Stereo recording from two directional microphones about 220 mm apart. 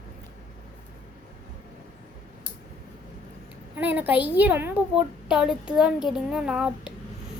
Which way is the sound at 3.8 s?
10° right (ahead or behind).